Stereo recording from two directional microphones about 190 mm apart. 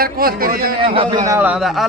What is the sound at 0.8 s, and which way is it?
Speech, 30° right (ahead or behind).